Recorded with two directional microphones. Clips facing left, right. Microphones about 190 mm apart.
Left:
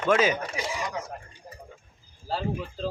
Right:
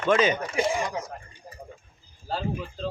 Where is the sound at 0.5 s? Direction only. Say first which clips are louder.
Right 7 dB; 55° right (ahead or behind).